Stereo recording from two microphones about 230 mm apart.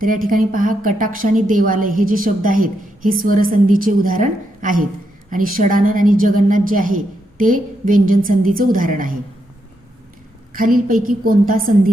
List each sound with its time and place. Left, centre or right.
0.0 s a woman's voice: right
10.5 s a woman's voice: right